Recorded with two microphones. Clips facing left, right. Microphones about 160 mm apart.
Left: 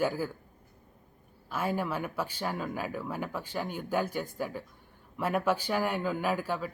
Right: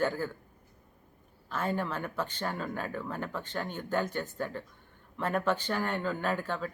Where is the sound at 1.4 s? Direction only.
10° left (ahead or behind).